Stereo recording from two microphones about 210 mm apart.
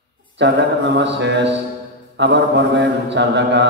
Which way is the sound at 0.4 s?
55° right (ahead or behind).